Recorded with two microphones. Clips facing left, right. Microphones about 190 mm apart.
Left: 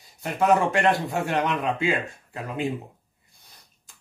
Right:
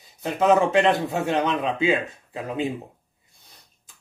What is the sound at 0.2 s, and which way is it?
Speech, 20° right (ahead or behind).